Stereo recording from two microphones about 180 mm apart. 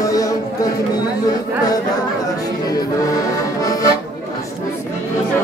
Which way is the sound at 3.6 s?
20° left (ahead or behind).